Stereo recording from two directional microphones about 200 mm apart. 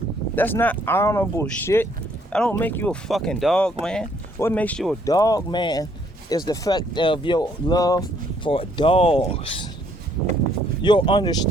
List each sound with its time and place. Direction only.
0.3 s speech: 10° left (ahead or behind)
5.0 s speech: 15° left (ahead or behind)
10.8 s speech: 25° left (ahead or behind)